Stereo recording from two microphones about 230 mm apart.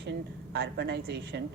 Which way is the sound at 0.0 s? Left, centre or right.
Right.